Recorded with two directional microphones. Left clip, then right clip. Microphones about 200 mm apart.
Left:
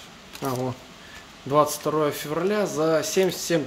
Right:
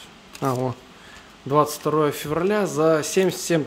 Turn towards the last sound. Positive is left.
turn(degrees=-30)  # may be behind; listen again after turning